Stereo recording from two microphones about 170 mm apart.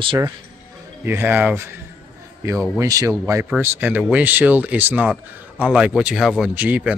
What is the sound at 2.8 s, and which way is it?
Speech, 20° right (ahead or behind).